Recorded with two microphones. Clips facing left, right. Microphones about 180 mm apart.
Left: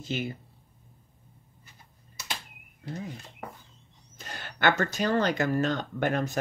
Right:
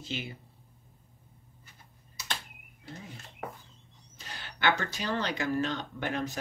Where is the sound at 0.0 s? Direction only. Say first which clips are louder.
Left 6 dB; 45° left (ahead or behind).